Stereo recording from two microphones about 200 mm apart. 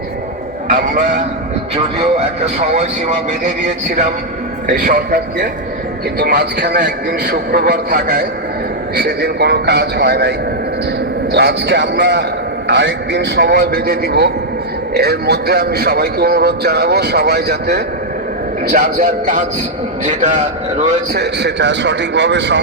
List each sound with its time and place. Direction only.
0.7 s a man's voice: 45° right (ahead or behind)
2.7 s a man's voice: 35° right (ahead or behind)
4.6 s a man's voice: 45° right (ahead or behind)
18.7 s a man's voice: 40° right (ahead or behind)
21.1 s a man's voice: 55° right (ahead or behind)